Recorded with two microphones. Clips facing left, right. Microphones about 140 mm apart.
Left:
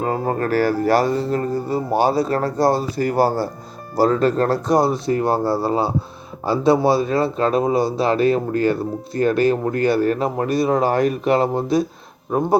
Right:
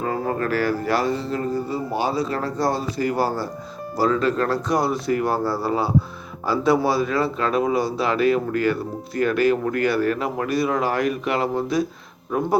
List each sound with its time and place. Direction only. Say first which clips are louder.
0.0 s a man's voice: left 3 dB; 35° left (ahead or behind)